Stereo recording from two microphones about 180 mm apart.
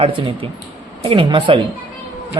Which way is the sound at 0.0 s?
30° right (ahead or behind).